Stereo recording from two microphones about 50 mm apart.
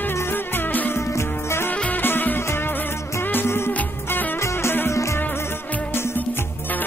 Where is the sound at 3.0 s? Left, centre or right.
Left.